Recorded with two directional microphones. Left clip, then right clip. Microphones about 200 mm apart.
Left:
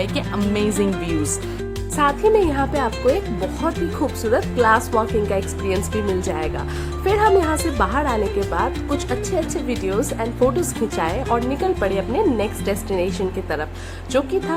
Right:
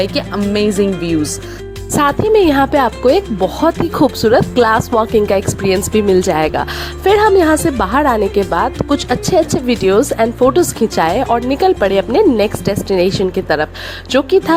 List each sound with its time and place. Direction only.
0.0 s speech: 30° right (ahead or behind)
2.0 s speech: 45° right (ahead or behind)